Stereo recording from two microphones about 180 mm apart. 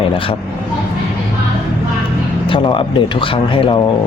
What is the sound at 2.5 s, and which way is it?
Speech, 30° left (ahead or behind).